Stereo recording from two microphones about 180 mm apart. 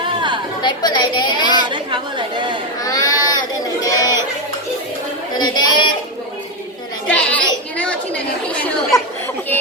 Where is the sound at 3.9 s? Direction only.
20° left (ahead or behind).